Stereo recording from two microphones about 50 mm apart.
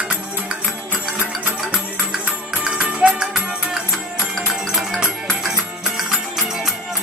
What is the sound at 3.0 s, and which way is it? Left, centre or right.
Music, right.